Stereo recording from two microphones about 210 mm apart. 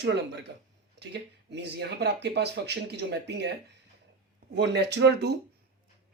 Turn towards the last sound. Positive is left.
turn(degrees=-55)  # may be behind; listen again after turning